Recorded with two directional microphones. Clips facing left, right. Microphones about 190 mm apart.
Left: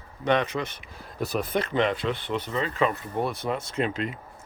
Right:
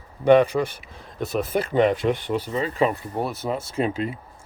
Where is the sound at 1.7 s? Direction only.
40° right (ahead or behind).